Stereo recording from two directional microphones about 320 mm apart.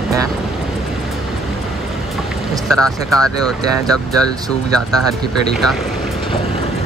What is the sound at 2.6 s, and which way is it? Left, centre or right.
Speech, centre.